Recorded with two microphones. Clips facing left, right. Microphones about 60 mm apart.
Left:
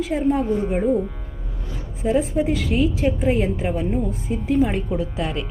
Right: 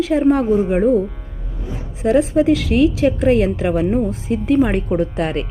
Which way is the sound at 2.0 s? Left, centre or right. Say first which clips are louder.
Right 6 dB; right.